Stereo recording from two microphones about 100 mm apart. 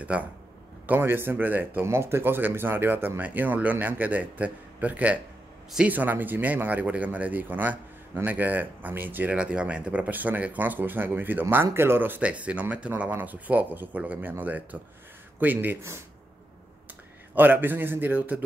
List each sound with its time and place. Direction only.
0.0 s speech: 15° right (ahead or behind)
17.4 s speech: 20° right (ahead or behind)